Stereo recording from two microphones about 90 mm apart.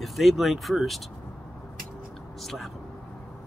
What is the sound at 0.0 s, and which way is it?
Speech, centre (ahead or behind).